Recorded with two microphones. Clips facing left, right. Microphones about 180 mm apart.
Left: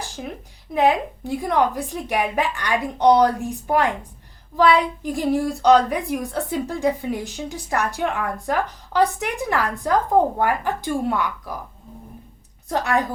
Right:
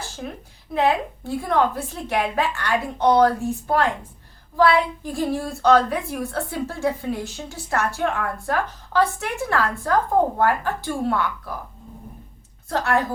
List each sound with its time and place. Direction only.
0.7 s a woman's voice: 15° left (ahead or behind)
12.6 s a woman's voice: 15° left (ahead or behind)